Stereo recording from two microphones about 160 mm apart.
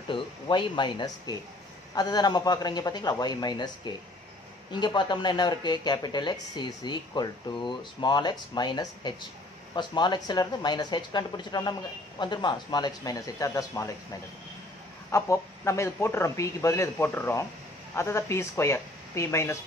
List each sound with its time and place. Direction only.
0.1 s speech: 30° left (ahead or behind)
15.0 s a man's voice: 20° left (ahead or behind)